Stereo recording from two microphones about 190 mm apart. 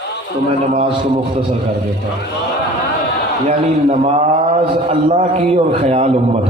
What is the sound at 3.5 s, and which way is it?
A man's voice, 35° right (ahead or behind).